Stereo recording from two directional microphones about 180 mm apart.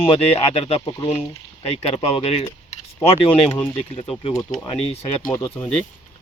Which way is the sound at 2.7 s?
35° left (ahead or behind).